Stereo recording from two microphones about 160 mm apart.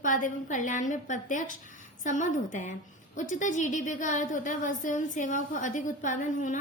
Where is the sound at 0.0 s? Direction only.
55° left (ahead or behind).